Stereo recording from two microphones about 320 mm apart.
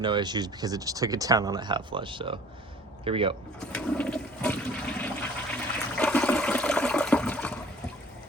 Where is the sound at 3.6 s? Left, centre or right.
Centre.